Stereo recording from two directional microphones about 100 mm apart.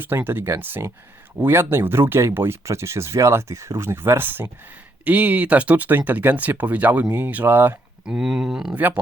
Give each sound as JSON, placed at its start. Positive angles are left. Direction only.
{"t": 0.0, "sound": "speech", "side_deg": -20}
{"t": 8.0, "sound": "speech", "side_deg": -5}
{"t": 8.7, "sound": "speech", "side_deg": -20}